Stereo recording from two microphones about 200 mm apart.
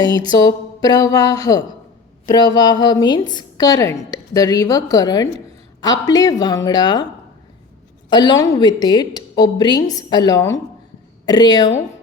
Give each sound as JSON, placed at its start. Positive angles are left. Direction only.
{"t": 0.0, "sound": "a sound", "side_deg": -20}
{"t": 0.3, "sound": "a woman's voice", "side_deg": 20}
{"t": 8.1, "sound": "a woman's voice", "side_deg": 20}